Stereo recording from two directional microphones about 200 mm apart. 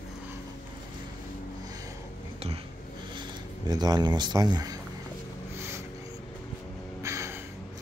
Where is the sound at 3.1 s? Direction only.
20° right (ahead or behind).